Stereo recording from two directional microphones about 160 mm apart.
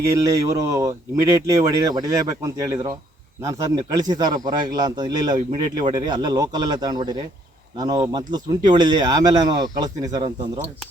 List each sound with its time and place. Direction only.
0.1 s speech: 20° right (ahead or behind)